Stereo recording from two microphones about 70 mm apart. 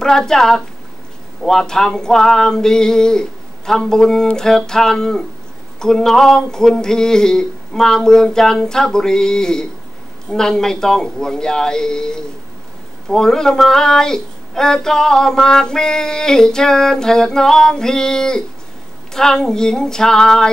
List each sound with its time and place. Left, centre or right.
0.0 s speech: centre